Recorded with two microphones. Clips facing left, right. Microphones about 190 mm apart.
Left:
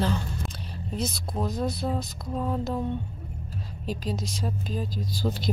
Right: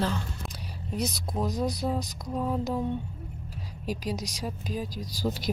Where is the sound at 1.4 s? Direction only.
5° right (ahead or behind).